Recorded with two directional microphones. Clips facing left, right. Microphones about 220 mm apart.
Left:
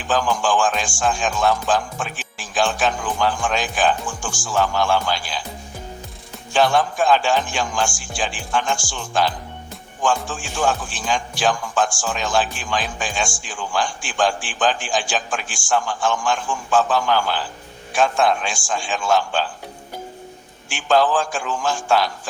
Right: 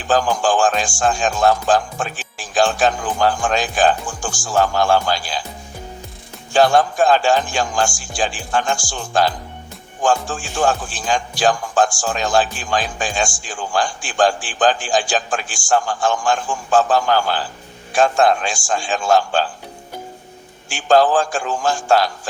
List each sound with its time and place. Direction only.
0.1 s speech: 40° right (ahead or behind)
6.6 s speech: 40° right (ahead or behind)
20.7 s speech: 40° right (ahead or behind)